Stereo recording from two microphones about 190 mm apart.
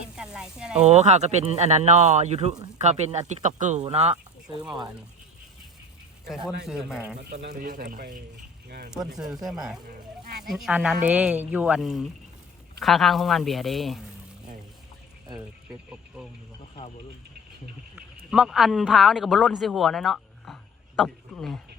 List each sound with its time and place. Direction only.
0.2 s a sound: 5° right (ahead or behind)
0.8 s speech: 35° right (ahead or behind)
4.4 s speech: centre (ahead or behind)
6.7 s speech: centre (ahead or behind)
7.5 s speech: 45° right (ahead or behind)
9.1 s speech: centre (ahead or behind)
15.9 s speech: 5° right (ahead or behind)
17.9 s speech: 5° right (ahead or behind)